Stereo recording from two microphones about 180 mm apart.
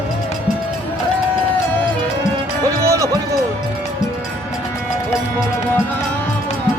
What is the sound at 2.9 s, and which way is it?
Music, 15° right (ahead or behind).